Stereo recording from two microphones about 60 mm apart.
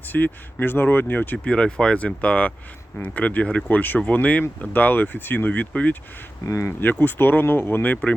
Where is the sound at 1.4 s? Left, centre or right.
Centre.